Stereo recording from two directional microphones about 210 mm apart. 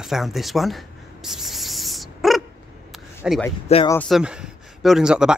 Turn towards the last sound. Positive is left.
turn(degrees=-5)  # may be behind; listen again after turning